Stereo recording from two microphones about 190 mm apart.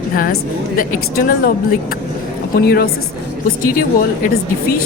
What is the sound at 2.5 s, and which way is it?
Speech, 55° left (ahead or behind).